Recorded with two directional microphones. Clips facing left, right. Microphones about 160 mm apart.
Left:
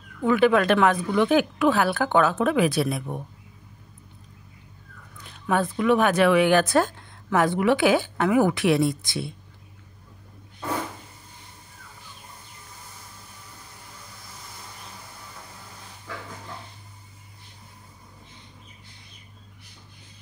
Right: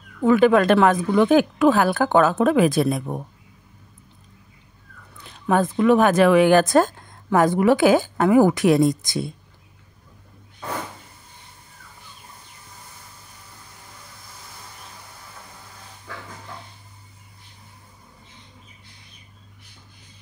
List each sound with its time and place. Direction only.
0.2 s speech: 45° right (ahead or behind)
5.1 s speech: 40° right (ahead or behind)